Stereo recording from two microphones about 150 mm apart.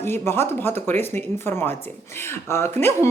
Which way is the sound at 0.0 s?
15° left (ahead or behind).